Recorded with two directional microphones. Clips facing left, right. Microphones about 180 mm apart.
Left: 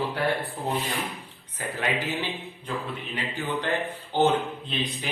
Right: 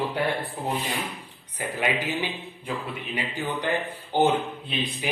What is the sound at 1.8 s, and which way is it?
A man's voice, 15° right (ahead or behind).